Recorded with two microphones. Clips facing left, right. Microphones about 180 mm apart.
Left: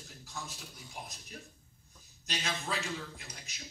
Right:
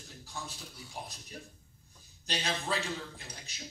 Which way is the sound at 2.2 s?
30° right (ahead or behind).